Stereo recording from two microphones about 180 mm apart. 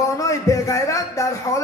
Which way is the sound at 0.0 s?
15° left (ahead or behind).